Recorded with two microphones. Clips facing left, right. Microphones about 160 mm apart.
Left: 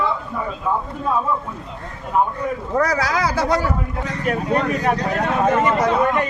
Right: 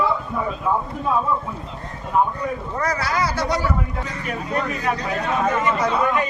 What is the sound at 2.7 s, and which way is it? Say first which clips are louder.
Speech: left 5 dB; 85° left.